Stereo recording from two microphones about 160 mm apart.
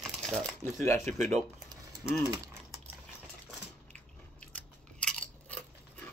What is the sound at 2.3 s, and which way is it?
Speech, 20° right (ahead or behind).